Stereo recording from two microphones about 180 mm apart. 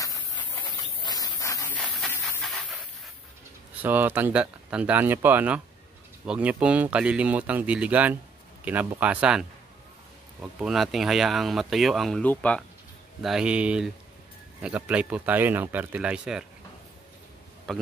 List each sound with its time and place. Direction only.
1.0 s a sound: 20° left (ahead or behind)
1.8 s dog: 5° left (ahead or behind)
3.8 s speech: 10° right (ahead or behind)
17.7 s a man's voice: 5° left (ahead or behind)